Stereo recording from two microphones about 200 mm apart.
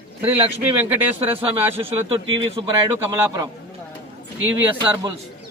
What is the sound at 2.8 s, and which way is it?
Speech, 15° right (ahead or behind).